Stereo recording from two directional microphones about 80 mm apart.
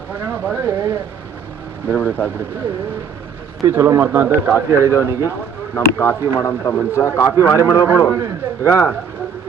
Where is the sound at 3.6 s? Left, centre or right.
Right.